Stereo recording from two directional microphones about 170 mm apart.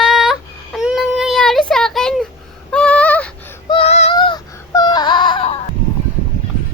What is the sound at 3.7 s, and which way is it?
Child singing, 35° left (ahead or behind).